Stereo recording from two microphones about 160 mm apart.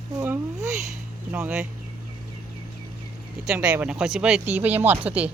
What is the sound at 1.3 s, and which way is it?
Speech, 15° right (ahead or behind).